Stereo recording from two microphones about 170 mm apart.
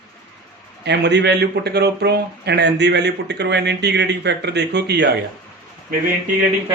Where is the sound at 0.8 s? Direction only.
85° right.